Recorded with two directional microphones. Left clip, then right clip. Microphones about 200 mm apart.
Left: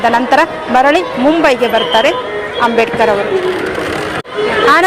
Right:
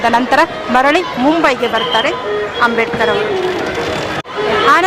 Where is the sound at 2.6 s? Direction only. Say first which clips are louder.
Left 3 dB; 15° left (ahead or behind).